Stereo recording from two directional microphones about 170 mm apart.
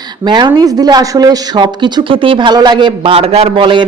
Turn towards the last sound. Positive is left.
turn(degrees=-30)  # may be behind; listen again after turning